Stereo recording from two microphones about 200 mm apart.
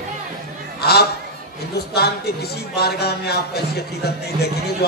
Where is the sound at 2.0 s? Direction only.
55° left (ahead or behind).